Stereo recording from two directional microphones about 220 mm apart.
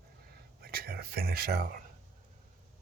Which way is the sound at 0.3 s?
45° right (ahead or behind).